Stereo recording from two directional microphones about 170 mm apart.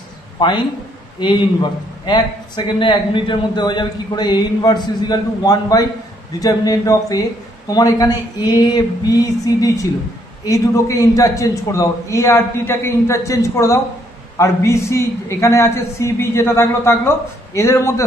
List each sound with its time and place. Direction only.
0.4 s a man's voice: 25° left (ahead or behind)
2.0 s a man's voice: 25° left (ahead or behind)